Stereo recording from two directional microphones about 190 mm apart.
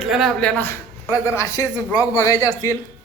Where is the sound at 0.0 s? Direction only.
Centre (ahead or behind); by 2.6 s 20° left (ahead or behind).